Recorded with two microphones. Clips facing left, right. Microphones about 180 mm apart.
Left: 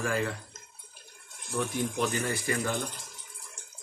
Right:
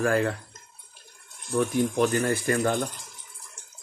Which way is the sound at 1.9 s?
55° right (ahead or behind).